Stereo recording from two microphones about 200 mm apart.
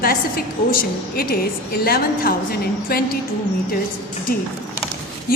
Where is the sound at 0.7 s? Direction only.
50° left (ahead or behind).